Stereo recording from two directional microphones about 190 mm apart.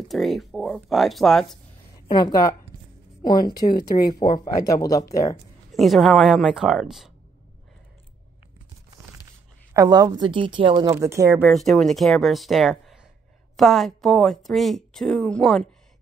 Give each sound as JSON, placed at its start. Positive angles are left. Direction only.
{"t": 0.1, "sound": "a woman's voice", "side_deg": 0}
{"t": 2.0, "sound": "speech", "side_deg": 25}
{"t": 5.7, "sound": "a woman's voice", "side_deg": 0}
{"t": 9.8, "sound": "speech", "side_deg": -20}
{"t": 11.4, "sound": "a woman's voice", "side_deg": 0}